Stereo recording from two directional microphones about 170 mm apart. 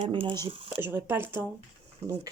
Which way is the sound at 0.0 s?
30° right (ahead or behind).